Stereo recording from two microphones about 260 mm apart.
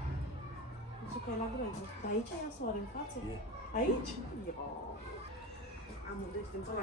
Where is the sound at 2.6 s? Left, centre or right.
Left.